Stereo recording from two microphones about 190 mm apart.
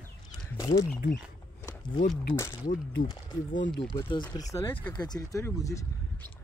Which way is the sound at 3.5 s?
75° left (ahead or behind).